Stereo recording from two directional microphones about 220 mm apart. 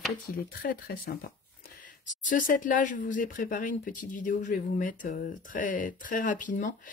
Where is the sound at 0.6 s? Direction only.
40° left (ahead or behind).